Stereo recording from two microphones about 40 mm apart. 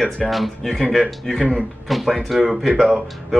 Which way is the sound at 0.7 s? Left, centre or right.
Centre.